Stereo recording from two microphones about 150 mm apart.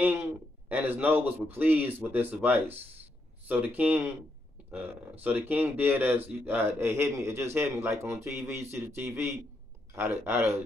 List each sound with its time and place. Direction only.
0.0 s a man's voice: 15° right (ahead or behind)